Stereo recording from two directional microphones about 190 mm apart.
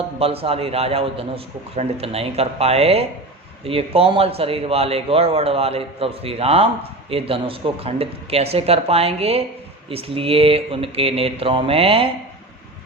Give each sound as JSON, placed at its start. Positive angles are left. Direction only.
{"t": 0.2, "sound": "a man's voice", "side_deg": -30}